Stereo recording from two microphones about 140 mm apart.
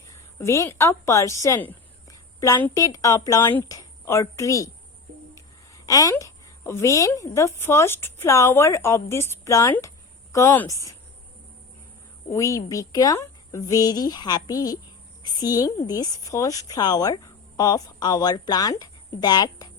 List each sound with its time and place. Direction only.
0.1 s a woman's voice: 20° left (ahead or behind)
12.3 s a woman's voice: 20° left (ahead or behind)